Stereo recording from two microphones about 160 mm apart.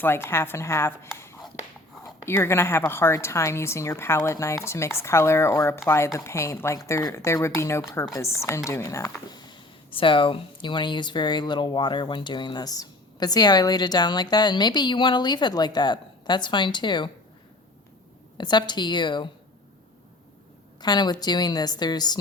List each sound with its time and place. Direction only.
0.0 s a woman's voice: 15° left (ahead or behind)
1.1 s a sound: 15° left (ahead or behind)
2.0 s a woman's voice: 15° left (ahead or behind)
18.3 s speech: 25° left (ahead or behind)
20.8 s speech: 25° left (ahead or behind)